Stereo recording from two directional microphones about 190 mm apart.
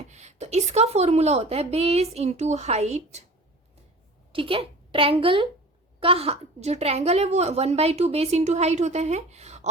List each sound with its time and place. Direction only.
0.0 s a woman's voice: 35° right (ahead or behind)
4.3 s a woman's voice: 30° right (ahead or behind)